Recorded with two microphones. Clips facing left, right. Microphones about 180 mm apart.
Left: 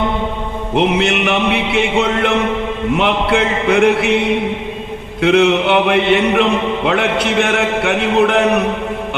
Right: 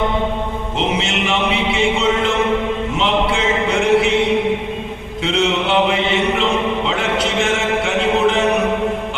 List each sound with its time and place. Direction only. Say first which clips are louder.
0.8 s mantra: left 6 dB; 60° left (ahead or behind)
5.2 s mantra: left 7 dB; 60° left (ahead or behind)